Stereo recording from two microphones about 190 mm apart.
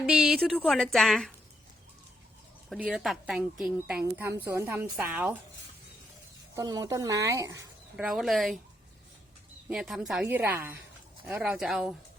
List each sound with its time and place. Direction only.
0.0 s a woman's voice: centre (ahead or behind)
2.6 s a woman's voice: centre (ahead or behind)
6.6 s a woman's voice: 20° right (ahead or behind)
7.9 s a woman's voice: 5° right (ahead or behind)
9.6 s a woman's voice: 5° right (ahead or behind)